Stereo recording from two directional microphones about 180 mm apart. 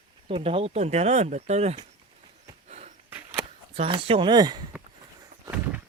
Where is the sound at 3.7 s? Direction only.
30° right (ahead or behind).